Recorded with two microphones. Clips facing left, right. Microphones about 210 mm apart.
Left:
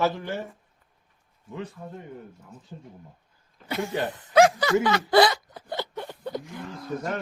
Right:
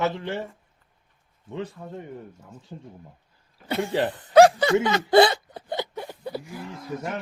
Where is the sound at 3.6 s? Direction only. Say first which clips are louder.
Right 4 dB; 30° right (ahead or behind); by 6.6 s 5° right (ahead or behind).